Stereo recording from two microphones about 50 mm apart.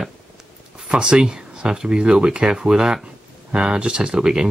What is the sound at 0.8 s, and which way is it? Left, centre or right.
Speech, centre.